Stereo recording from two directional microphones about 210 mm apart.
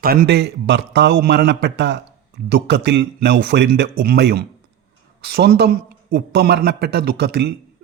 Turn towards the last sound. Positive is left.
turn(degrees=-50)  # may be behind; listen again after turning